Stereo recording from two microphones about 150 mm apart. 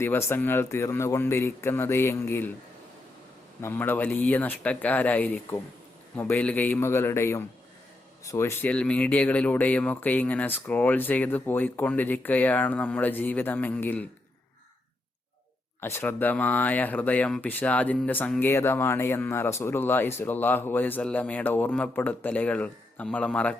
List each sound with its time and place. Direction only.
0.0 s speech: 15° left (ahead or behind)
3.6 s speech: 15° left (ahead or behind)
15.8 s speech: 15° left (ahead or behind)